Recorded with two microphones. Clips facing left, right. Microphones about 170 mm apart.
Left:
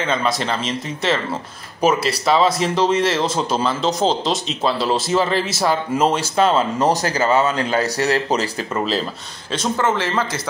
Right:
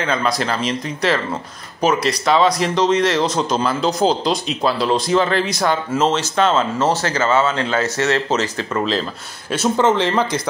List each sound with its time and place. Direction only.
0.0 s speech: centre (ahead or behind)
6.9 s speech: 40° left (ahead or behind)
7.2 s speech: 15° left (ahead or behind)
7.5 s speech: 35° left (ahead or behind)
8.3 s speech: 10° left (ahead or behind)
9.5 s speech: 15° right (ahead or behind)